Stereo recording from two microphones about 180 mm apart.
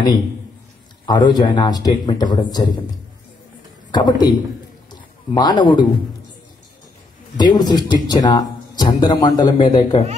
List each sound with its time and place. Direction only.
1.0 s a man's voice: 25° left (ahead or behind)
3.9 s a man's voice: 25° left (ahead or behind)
7.3 s a man's voice: 25° left (ahead or behind)